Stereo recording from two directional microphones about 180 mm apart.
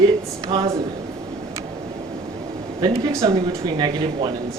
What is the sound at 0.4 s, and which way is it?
Speech, 20° right (ahead or behind).